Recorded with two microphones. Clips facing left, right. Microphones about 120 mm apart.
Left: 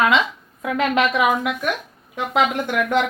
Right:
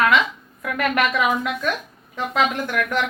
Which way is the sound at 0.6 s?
20° left (ahead or behind).